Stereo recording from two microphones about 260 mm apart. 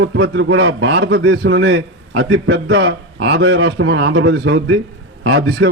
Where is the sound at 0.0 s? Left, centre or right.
Right.